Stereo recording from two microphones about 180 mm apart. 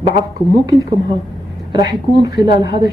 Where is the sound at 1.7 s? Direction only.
20° right (ahead or behind).